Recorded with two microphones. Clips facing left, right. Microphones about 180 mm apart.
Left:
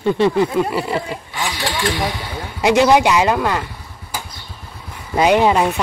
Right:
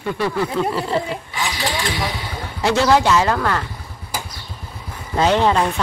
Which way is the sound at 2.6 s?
15° left (ahead or behind).